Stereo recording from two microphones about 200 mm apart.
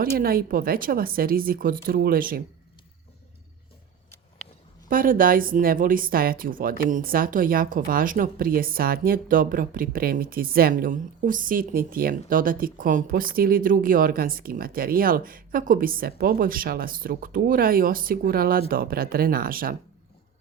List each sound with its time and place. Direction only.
0.2 s a woman's voice: 45° right (ahead or behind)
4.9 s a woman's voice: 45° right (ahead or behind)